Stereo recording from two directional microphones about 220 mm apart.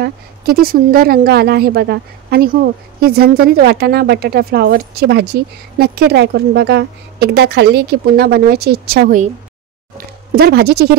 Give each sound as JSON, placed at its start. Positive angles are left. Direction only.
{"t": 0.0, "sound": "a woman's voice", "side_deg": -40}